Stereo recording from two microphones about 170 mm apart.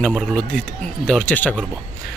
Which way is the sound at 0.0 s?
Centre (ahead or behind).